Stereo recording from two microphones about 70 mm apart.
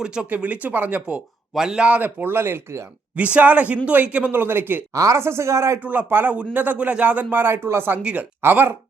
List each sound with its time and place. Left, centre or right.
0.0 s speech: centre
1.5 s speech: centre; by 2.8 s right
3.3 s speech: centre
4.3 s a man's voice: right
4.9 s speech: right
5.8 s speech: right